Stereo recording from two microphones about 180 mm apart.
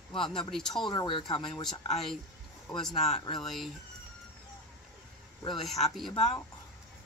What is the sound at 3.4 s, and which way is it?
Speech, centre (ahead or behind).